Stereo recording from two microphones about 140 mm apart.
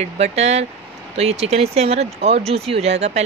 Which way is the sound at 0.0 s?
50° right (ahead or behind).